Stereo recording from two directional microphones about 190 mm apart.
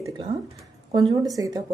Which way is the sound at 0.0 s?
25° right (ahead or behind).